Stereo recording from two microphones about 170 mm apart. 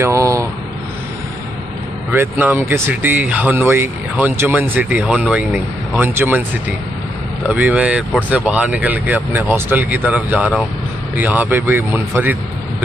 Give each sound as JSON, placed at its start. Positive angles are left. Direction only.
{"t": 0.0, "sound": "speech", "side_deg": -20}
{"t": 2.1, "sound": "speech", "side_deg": -10}
{"t": 7.4, "sound": "speech", "side_deg": -10}